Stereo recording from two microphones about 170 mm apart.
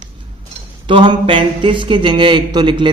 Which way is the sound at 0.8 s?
30° right (ahead or behind).